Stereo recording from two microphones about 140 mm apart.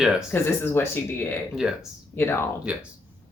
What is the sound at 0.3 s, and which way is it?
Speech, 15° left (ahead or behind).